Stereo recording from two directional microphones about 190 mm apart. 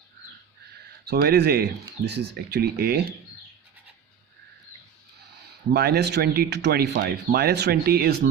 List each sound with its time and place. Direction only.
1.0 s speech: 55° right (ahead or behind)
5.7 s speech: 55° right (ahead or behind)